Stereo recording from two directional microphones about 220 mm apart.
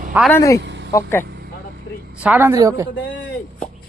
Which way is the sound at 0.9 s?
15° left (ahead or behind).